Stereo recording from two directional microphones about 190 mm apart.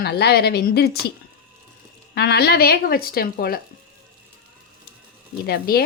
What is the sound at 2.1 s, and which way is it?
Speech, 60° left (ahead or behind).